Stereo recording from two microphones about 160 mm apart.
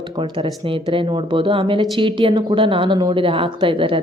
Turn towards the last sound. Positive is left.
turn(degrees=-35)  # may be behind; listen again after turning